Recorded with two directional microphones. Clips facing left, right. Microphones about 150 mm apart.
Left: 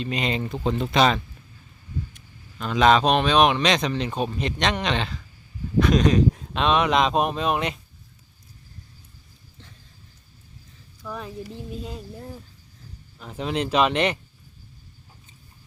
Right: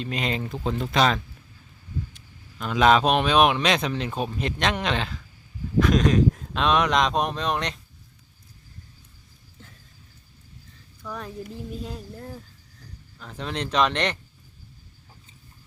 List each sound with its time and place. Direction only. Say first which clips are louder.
0.0 s speech: left 2 dB; centre (ahead or behind)
2.6 s speech: left 1 dB; 5° right (ahead or behind)
11.0 s speech: left 1 dB; 5° left (ahead or behind)